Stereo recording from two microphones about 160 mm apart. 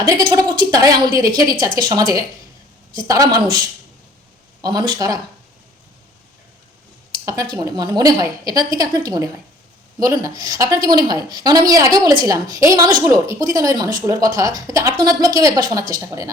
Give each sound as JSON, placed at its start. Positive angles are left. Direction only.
{"t": 0.0, "sound": "a woman's voice", "side_deg": -25}
{"t": 4.6, "sound": "a woman's voice", "side_deg": -25}
{"t": 7.3, "sound": "a woman's voice", "side_deg": -25}